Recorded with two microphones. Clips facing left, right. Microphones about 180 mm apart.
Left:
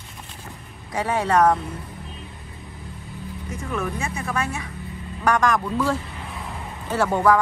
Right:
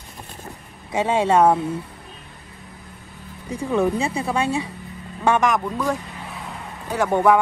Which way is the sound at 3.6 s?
20° right (ahead or behind).